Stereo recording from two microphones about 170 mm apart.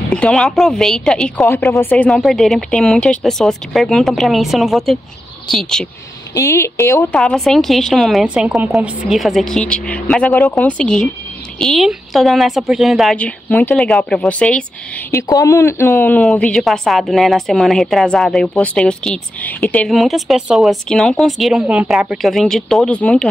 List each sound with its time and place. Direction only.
0.1 s a woman's voice: 5° left (ahead or behind)
1.5 s a woman's voice: 15° left (ahead or behind)
6.3 s a woman's voice: 15° left (ahead or behind)
7.2 s a woman's voice: centre (ahead or behind)
15.0 s a woman's voice: 20° left (ahead or behind)